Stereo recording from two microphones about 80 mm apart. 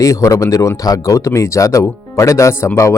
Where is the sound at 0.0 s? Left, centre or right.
Left.